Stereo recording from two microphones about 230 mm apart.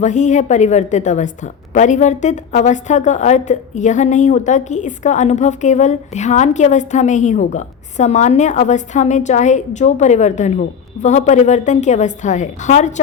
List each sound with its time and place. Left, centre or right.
0.0 s a woman's voice: left